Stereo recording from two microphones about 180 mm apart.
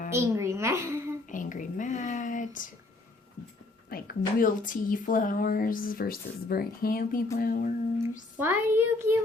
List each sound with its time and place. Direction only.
0.1 s a woman's voice: 15° right (ahead or behind)
1.3 s a sound: 45° left (ahead or behind)
3.8 s speech: 55° left (ahead or behind)
8.4 s a child's voice: 10° right (ahead or behind)